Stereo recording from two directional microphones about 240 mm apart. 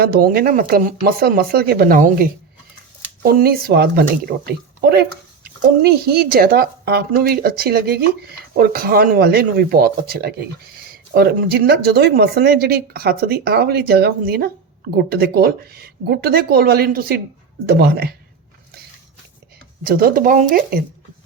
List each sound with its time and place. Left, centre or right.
0.0 s speech: right
19.8 s speech: right